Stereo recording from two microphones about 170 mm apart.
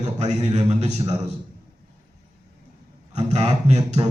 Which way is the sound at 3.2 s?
40° right (ahead or behind).